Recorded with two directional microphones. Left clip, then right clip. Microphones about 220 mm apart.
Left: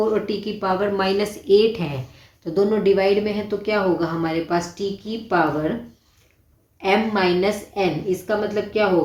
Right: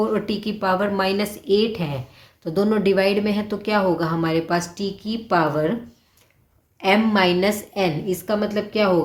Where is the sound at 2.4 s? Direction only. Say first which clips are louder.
Left 1 dB; 40° right (ahead or behind).